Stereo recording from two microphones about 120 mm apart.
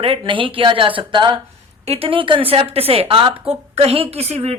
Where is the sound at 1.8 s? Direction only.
55° right (ahead or behind).